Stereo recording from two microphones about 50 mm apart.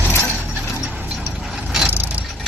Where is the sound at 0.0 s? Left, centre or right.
Left.